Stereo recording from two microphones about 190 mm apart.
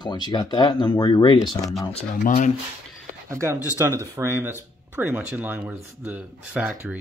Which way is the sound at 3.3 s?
15° right (ahead or behind).